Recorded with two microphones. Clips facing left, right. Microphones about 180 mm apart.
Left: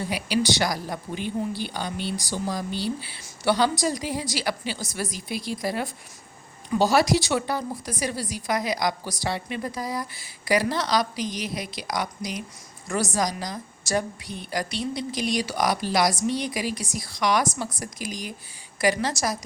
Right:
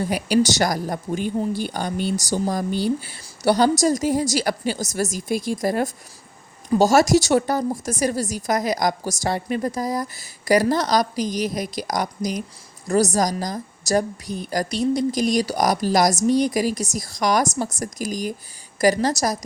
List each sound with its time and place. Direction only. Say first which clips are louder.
0.0 s a woman's voice: right 6 dB; 45° right (ahead or behind)